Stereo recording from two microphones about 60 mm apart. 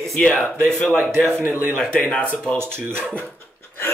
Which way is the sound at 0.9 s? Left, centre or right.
Right.